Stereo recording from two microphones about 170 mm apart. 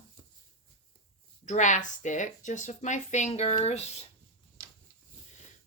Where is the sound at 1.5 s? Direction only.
45° left (ahead or behind).